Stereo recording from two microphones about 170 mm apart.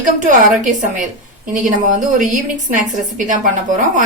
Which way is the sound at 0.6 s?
50° right (ahead or behind).